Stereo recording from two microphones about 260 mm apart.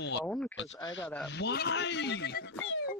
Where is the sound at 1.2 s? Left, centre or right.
Left.